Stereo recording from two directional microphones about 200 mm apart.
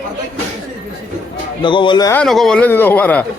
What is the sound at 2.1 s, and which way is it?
A man's voice, centre (ahead or behind).